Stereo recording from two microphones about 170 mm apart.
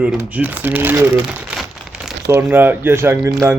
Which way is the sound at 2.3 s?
15° right (ahead or behind).